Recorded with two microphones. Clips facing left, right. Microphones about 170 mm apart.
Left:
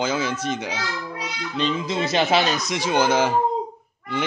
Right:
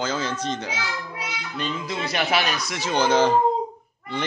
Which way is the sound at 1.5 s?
20° left (ahead or behind).